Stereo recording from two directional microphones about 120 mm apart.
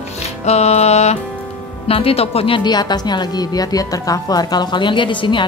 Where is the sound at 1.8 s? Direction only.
50° left (ahead or behind).